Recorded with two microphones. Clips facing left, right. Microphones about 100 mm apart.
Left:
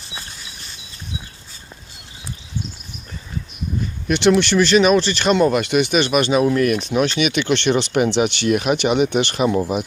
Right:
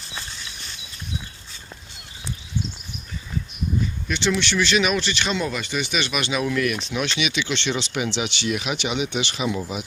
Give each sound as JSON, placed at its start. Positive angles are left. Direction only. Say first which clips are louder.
{"t": 4.1, "sound": "speech", "louder": "left 9 dB", "side_deg": 55}
{"t": 5.3, "sound": "speech", "louder": "left 14 dB", "side_deg": 55}